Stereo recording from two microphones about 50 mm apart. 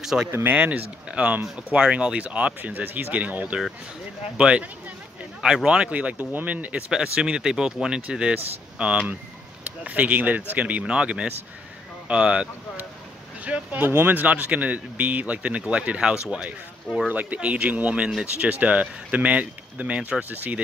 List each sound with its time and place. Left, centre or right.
0.0 s speech: centre
0.5 s speech: right
2.7 s speech: right
4.4 s speech: right
6.9 s speech: centre